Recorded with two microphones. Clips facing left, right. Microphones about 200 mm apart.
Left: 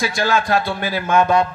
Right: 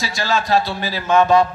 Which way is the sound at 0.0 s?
55° left (ahead or behind).